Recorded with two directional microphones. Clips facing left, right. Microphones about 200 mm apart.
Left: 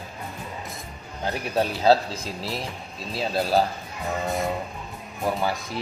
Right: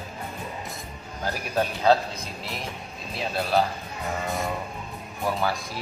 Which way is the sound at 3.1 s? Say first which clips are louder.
Left 2 dB; 35° left (ahead or behind).